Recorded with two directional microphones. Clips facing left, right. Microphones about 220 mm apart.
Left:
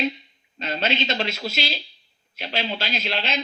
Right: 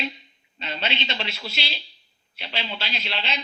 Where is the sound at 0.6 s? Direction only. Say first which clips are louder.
Left 5 dB; 45° left (ahead or behind).